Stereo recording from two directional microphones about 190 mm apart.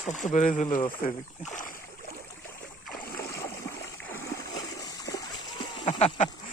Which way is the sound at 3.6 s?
15° left (ahead or behind).